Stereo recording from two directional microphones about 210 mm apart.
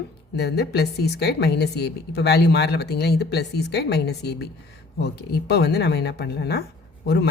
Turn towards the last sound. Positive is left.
turn(degrees=50)  # may be behind; listen again after turning